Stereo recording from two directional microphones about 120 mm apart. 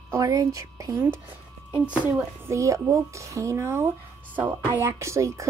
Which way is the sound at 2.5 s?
25° right (ahead or behind).